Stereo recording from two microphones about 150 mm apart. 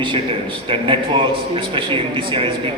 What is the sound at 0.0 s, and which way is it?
A man's voice, 35° right (ahead or behind).